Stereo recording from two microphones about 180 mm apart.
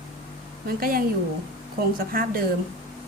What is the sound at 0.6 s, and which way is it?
Speech, 55° right (ahead or behind).